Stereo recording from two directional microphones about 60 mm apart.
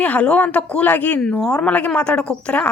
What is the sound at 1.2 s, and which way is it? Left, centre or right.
Speech, centre.